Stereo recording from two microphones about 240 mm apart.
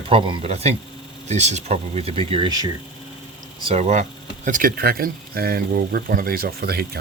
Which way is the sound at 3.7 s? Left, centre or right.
Right.